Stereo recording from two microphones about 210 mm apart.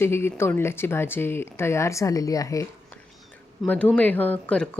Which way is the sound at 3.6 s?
5° left (ahead or behind).